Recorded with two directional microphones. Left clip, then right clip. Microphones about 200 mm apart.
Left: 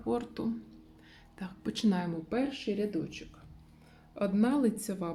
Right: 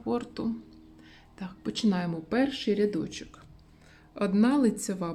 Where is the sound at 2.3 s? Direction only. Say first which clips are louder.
Right 7 dB; 30° right (ahead or behind).